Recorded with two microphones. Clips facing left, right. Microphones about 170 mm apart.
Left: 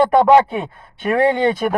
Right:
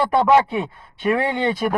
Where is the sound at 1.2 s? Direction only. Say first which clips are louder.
Left 6 dB; 55° left (ahead or behind).